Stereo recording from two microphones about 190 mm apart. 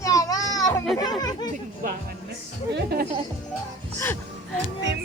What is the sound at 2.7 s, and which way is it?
Speech, 55° right (ahead or behind).